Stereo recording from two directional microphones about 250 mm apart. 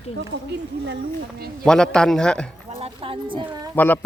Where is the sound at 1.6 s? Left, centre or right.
Centre.